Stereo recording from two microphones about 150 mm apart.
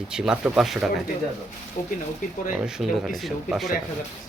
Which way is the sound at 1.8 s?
55° left (ahead or behind).